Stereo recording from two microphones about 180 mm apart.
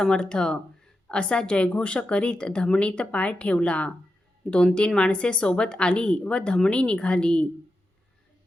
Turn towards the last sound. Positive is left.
turn(degrees=5)  # may be behind; listen again after turning